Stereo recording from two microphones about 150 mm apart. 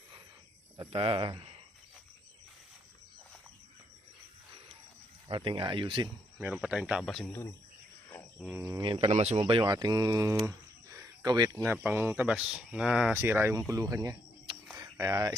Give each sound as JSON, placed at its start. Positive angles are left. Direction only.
{"t": 0.9, "sound": "speech", "side_deg": -35}
{"t": 5.3, "sound": "speech", "side_deg": -35}
{"t": 6.4, "sound": "speech", "side_deg": -10}
{"t": 8.1, "sound": "cricket", "side_deg": 10}
{"t": 8.5, "sound": "speech", "side_deg": -25}
{"t": 9.1, "sound": "speech", "side_deg": -45}
{"t": 9.4, "sound": "speech", "side_deg": -30}